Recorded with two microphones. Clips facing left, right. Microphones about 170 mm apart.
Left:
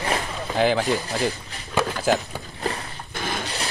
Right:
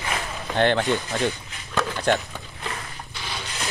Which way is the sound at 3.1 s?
50° left (ahead or behind).